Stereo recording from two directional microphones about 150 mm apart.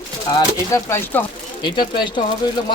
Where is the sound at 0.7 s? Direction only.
15° left (ahead or behind).